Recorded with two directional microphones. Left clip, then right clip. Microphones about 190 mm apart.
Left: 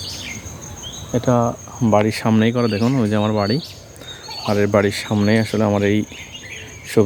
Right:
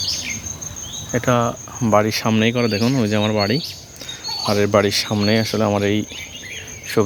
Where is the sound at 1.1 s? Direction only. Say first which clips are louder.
Even; 15° left (ahead or behind).